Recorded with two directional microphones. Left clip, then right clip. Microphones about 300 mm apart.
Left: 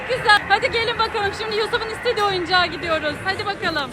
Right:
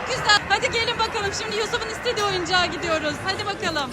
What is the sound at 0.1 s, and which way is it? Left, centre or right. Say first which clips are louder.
Speech: left 4 dB; centre.